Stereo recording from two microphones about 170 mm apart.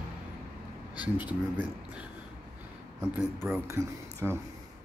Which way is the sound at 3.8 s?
15° right (ahead or behind).